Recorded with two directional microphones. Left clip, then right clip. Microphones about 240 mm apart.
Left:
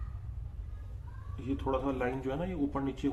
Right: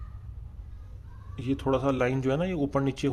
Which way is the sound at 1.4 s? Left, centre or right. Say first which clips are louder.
Right 6 dB; right.